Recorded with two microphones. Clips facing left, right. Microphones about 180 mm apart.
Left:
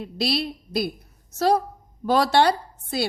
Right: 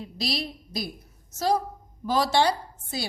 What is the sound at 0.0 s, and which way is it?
A woman's voice, 65° left (ahead or behind).